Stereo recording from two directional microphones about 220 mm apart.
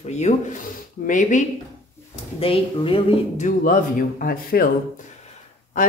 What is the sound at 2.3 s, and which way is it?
A woman's voice, 25° left (ahead or behind).